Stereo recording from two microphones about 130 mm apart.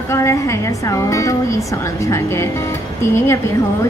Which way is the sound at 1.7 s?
25° left (ahead or behind).